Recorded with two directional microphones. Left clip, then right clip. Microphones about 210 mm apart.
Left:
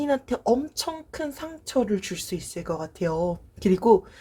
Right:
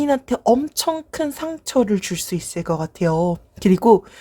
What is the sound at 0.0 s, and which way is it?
Speech, 35° right (ahead or behind).